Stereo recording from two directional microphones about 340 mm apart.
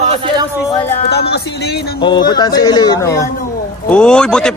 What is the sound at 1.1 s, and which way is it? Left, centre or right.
Speech, left.